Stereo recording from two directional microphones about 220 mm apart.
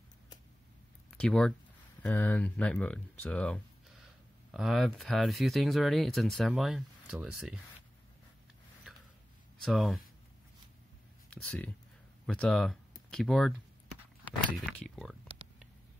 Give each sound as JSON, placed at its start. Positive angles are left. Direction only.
{"t": 1.1, "sound": "speech", "side_deg": 5}
{"t": 9.6, "sound": "speech", "side_deg": 0}
{"t": 11.2, "sound": "speech", "side_deg": 5}
{"t": 14.5, "sound": "speech", "side_deg": 0}